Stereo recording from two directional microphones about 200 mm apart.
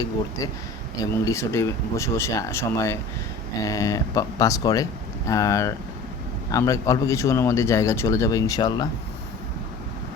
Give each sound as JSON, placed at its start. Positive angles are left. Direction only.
{"t": 1.2, "sound": "a man's voice", "side_deg": 15}